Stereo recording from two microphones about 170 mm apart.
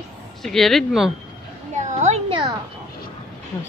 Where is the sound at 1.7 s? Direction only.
45° right (ahead or behind).